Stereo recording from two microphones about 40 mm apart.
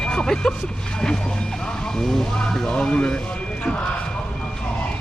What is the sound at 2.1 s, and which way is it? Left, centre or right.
Speech, centre.